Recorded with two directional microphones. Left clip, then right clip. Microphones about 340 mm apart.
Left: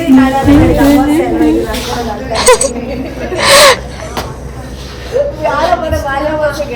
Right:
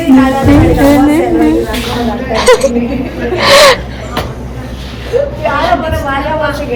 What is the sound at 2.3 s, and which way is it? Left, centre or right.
Speech, centre.